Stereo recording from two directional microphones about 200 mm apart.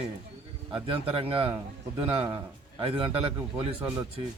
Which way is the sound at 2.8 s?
25° right (ahead or behind).